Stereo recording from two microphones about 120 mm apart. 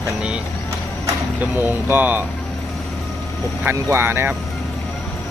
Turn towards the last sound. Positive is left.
turn(degrees=-20)  # may be behind; listen again after turning